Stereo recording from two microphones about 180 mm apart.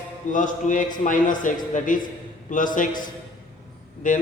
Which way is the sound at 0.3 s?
45° left (ahead or behind).